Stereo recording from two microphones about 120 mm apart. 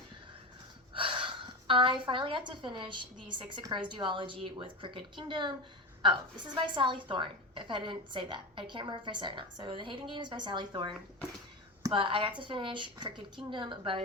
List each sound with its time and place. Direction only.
0.9 s a woman's voice: 45° right (ahead or behind)